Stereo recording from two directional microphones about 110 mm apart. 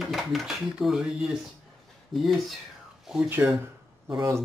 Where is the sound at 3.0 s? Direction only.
5° right (ahead or behind).